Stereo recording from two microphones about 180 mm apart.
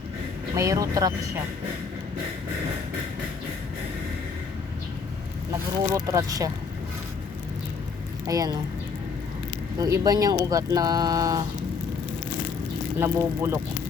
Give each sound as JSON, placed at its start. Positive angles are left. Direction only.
{"t": 0.5, "sound": "speech", "side_deg": -20}
{"t": 5.9, "sound": "speech", "side_deg": -20}
{"t": 8.3, "sound": "speech", "side_deg": -20}
{"t": 9.7, "sound": "speech", "side_deg": -20}
{"t": 13.0, "sound": "speech", "side_deg": -15}